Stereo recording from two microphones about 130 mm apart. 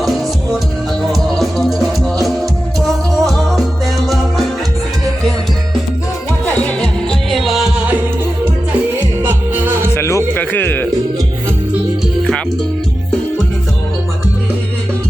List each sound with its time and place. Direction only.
1.1 s music: centre (ahead or behind)
6.4 s music: 10° left (ahead or behind)
9.2 s music: 15° right (ahead or behind)
9.9 s music: 20° left (ahead or behind)